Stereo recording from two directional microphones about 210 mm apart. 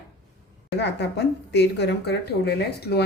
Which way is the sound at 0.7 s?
55° left (ahead or behind).